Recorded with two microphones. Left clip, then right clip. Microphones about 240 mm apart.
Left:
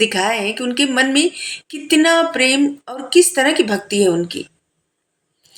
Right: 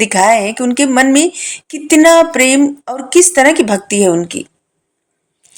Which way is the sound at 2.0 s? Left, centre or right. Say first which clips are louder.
Right 8 dB; right.